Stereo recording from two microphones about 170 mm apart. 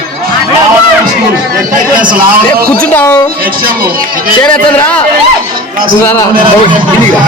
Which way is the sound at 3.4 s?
60° right (ahead or behind).